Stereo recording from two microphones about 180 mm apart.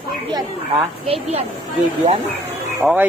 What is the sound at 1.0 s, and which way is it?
Speech, 35° right (ahead or behind).